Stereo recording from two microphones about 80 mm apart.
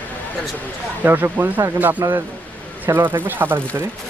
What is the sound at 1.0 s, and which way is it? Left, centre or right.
A man's voice, right.